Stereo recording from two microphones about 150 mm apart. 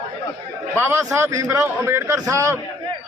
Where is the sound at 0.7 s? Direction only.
15° right (ahead or behind).